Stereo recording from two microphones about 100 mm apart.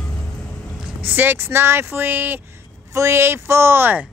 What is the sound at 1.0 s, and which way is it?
Speech, 20° right (ahead or behind).